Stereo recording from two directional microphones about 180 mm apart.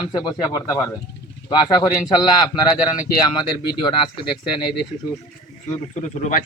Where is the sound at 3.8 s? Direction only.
25° left (ahead or behind).